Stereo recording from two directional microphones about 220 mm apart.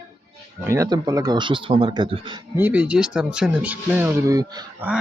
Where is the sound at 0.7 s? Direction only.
15° right (ahead or behind).